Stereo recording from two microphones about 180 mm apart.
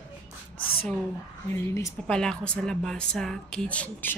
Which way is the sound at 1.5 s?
15° left (ahead or behind).